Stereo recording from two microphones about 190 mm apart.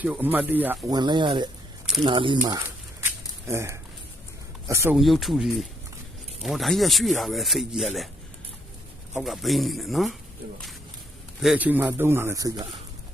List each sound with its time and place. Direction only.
0.0 s a man's voice: 10° right (ahead or behind)
0.9 s speech: 25° right (ahead or behind)
2.5 s a sound: 15° right (ahead or behind)
4.7 s a man's voice: 15° right (ahead or behind)
4.9 s speech: centre (ahead or behind)
9.1 s speech: centre (ahead or behind)
11.3 s a man's voice: 5° right (ahead or behind)